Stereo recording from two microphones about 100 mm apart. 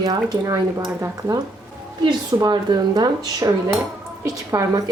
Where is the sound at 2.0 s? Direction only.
50° right (ahead or behind); by 4.8 s 30° right (ahead or behind).